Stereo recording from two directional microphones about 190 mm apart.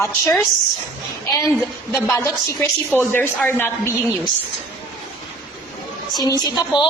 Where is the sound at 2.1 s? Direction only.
15° left (ahead or behind).